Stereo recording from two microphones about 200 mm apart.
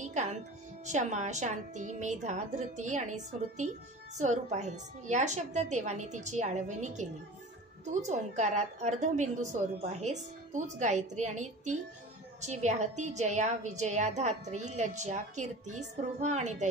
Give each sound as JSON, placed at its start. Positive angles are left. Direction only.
{"t": 0.0, "sound": "a woman's voice", "side_deg": -35}